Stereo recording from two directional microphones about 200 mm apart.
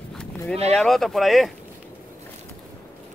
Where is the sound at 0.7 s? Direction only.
Centre (ahead or behind).